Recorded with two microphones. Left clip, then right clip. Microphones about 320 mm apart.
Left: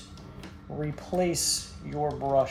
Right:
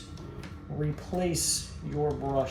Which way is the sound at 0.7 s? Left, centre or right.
Left.